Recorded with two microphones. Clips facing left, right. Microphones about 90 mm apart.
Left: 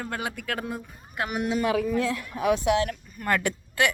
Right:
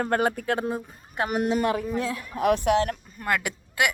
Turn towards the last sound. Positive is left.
turn(degrees=-10)  # may be behind; listen again after turning